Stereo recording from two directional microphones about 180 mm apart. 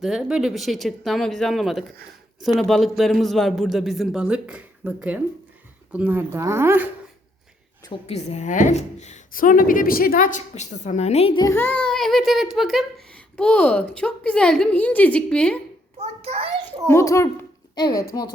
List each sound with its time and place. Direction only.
0.0 s a man's voice: 5° right (ahead or behind)
8.0 s a woman's voice: 35° left (ahead or behind)
11.3 s a child's voice: 15° left (ahead or behind)
16.0 s a sound: 35° right (ahead or behind)
16.8 s a child's voice: 15° left (ahead or behind)